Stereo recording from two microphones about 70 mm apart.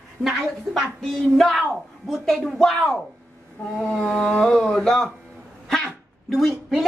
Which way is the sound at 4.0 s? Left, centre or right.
Centre.